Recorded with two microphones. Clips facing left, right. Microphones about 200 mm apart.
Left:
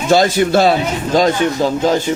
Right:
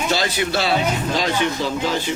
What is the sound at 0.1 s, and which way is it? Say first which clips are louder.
Speech: left 13 dB; 50° left (ahead or behind).